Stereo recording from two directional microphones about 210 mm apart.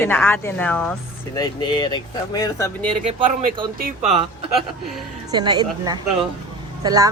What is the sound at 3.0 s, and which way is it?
Speech, 30° right (ahead or behind).